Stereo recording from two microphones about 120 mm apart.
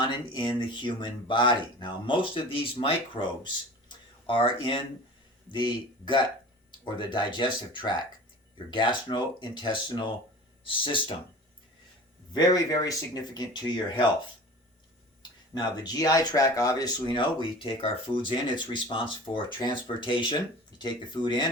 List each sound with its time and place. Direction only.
0.0 s speech: 40° left (ahead or behind)
12.3 s speech: 35° left (ahead or behind)
15.2 s speech: 35° left (ahead or behind)